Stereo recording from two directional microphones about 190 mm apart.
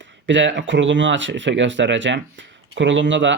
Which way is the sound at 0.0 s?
75° right (ahead or behind).